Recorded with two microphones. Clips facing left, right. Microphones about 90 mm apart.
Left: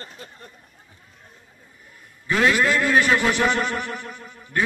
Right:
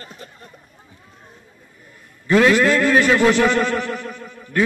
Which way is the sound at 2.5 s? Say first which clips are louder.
Right 4 dB; 15° left (ahead or behind).